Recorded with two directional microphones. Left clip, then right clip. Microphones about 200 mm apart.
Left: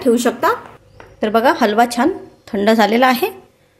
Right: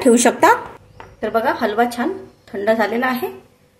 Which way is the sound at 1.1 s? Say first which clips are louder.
Left 5 dB; 40° left (ahead or behind).